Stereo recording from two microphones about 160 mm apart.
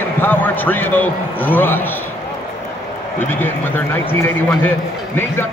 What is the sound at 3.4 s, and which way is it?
Speech, 15° left (ahead or behind).